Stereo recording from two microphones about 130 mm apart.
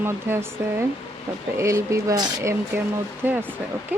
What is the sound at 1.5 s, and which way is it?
Speech, 20° right (ahead or behind).